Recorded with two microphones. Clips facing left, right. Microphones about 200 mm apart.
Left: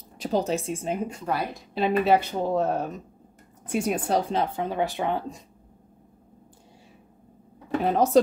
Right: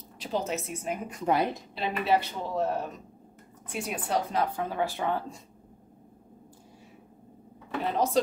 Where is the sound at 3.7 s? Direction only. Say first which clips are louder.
Left 6 dB; 45° left (ahead or behind).